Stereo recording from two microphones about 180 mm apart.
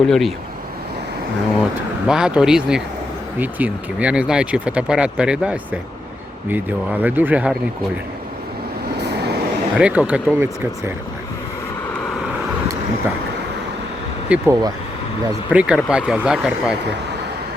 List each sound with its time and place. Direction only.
0.0 s speech: centre (ahead or behind)
2.0 s speech: 5° right (ahead or behind)
9.7 s speech: 5° right (ahead or behind)
14.3 s speech: 15° right (ahead or behind)